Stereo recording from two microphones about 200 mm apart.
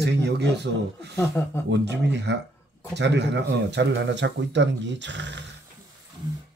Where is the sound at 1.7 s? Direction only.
60° right (ahead or behind).